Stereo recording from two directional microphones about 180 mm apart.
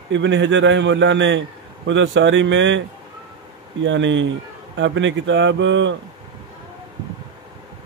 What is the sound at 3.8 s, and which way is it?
Speech, 90° right.